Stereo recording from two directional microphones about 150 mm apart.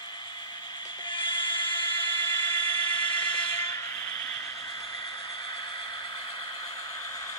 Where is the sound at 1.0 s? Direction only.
30° left (ahead or behind).